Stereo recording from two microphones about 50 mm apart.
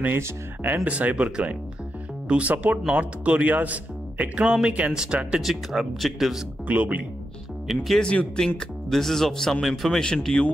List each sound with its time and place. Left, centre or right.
0.8 s speech: right
4.5 s speech: centre
5.4 s speech: centre
6.7 s speech: right
7.6 s speech: centre
8.0 s speech: left
8.5 s speech: centre
9.9 s speech: centre